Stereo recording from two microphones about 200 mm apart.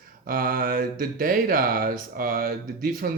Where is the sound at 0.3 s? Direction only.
45° right (ahead or behind).